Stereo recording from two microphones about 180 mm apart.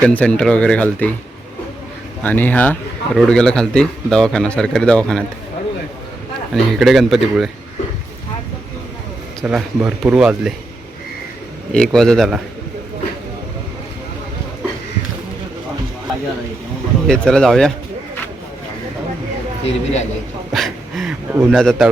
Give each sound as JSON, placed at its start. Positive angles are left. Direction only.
{"t": 0.0, "sound": "speech", "side_deg": 5}
{"t": 2.2, "sound": "a man's voice", "side_deg": 10}
{"t": 6.5, "sound": "a man's voice", "side_deg": 0}
{"t": 9.4, "sound": "a man's voice", "side_deg": -5}
{"t": 11.7, "sound": "a man's voice", "side_deg": 5}
{"t": 17.1, "sound": "a man's voice", "side_deg": 5}
{"t": 19.6, "sound": "a man's voice", "side_deg": 40}
{"t": 20.5, "sound": "a sound", "side_deg": 0}
{"t": 21.5, "sound": "a man's voice", "side_deg": 0}